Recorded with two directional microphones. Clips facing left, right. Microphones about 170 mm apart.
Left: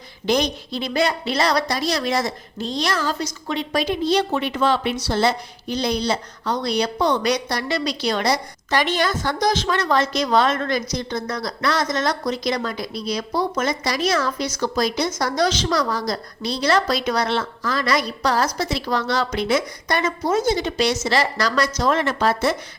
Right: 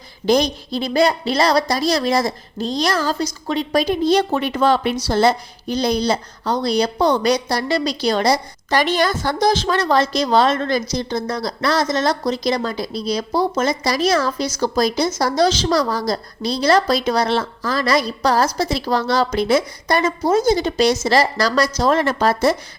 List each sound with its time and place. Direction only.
0.3 s a woman's voice: 35° right (ahead or behind)